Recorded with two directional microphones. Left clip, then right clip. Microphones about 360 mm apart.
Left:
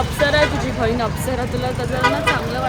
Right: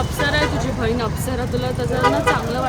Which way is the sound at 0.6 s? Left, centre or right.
Centre.